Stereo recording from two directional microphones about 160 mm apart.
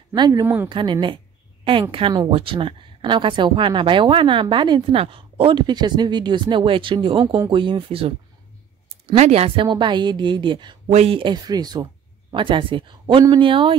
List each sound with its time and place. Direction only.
0.1 s a woman's voice: 25° right (ahead or behind)
0.7 s a woman's voice: 30° right (ahead or behind)